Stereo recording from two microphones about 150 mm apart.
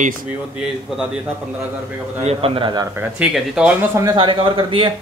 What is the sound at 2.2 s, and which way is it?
Speech, 40° right (ahead or behind).